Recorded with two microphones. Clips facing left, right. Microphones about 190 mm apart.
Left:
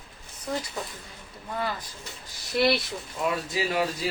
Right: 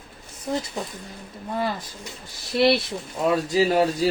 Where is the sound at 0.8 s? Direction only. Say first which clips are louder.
Right 4 dB; 20° right (ahead or behind).